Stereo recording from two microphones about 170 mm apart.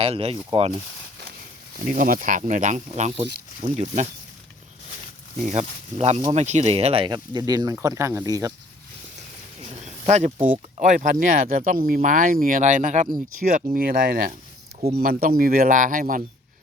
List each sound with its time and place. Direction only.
0.0 s speech: 35° right (ahead or behind)
1.9 s speech: 50° right (ahead or behind)
5.5 s speech: 40° right (ahead or behind); by 8.5 s 20° right (ahead or behind)
9.6 s a sound: 40° right (ahead or behind)
10.8 s speech: 45° right (ahead or behind)
13.7 s speech: 55° right (ahead or behind)
14.8 s speech: 35° right (ahead or behind)
15.0 s speech: 60° right (ahead or behind)